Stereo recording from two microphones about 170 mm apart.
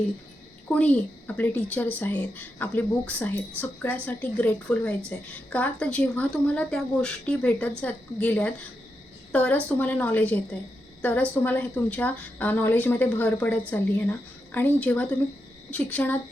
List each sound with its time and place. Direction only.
0.7 s speech: 10° left (ahead or behind)